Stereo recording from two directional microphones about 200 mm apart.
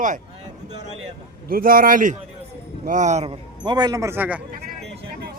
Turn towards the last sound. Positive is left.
turn(degrees=-10)  # may be behind; listen again after turning